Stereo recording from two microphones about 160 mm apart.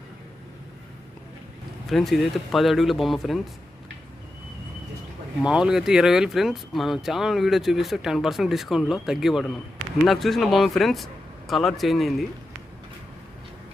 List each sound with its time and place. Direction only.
1.9 s speech: centre (ahead or behind)
5.4 s speech: 5° right (ahead or behind)